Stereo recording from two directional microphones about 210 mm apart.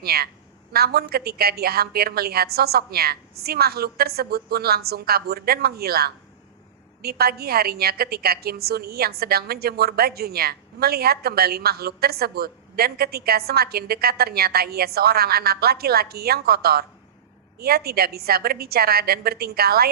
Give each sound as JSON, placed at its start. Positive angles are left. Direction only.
{"t": 0.0, "sound": "a woman's voice", "side_deg": -45}